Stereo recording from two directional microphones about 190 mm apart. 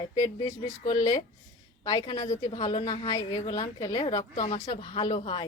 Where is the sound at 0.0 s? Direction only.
20° left (ahead or behind).